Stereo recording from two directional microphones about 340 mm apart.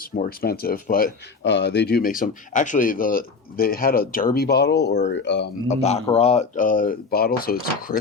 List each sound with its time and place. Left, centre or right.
0.2 s speech: left
5.6 s speech: centre